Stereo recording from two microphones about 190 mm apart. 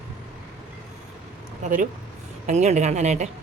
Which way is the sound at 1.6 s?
40° right (ahead or behind).